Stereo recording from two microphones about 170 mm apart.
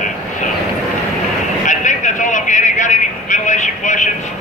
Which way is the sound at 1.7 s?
45° left (ahead or behind).